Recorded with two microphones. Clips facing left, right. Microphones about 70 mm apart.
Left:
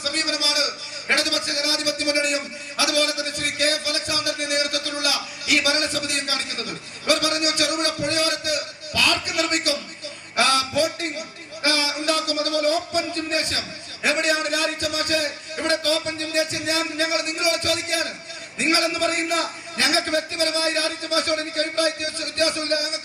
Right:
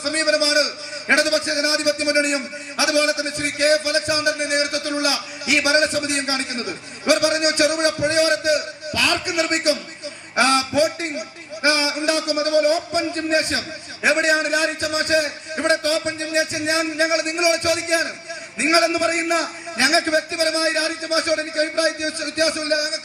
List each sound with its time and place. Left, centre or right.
0.0 s a man's voice: right